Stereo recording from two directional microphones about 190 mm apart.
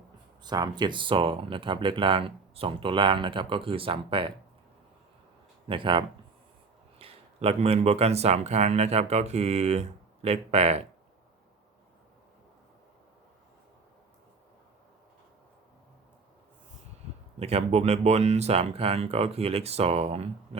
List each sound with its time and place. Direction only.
0.4 s speech: 20° right (ahead or behind)
5.6 s speech: 25° right (ahead or behind)
17.4 s speech: 35° right (ahead or behind)